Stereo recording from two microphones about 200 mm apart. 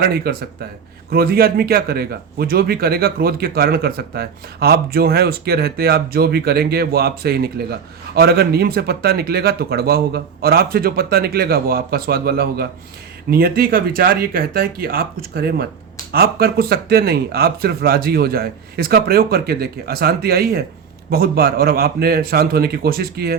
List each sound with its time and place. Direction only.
0.0 s a man's voice: 50° right (ahead or behind)